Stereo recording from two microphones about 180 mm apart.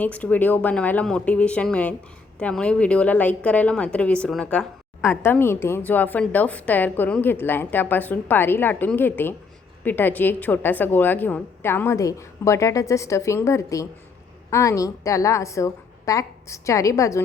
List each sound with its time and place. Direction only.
0.0 s a woman's voice: 10° left (ahead or behind)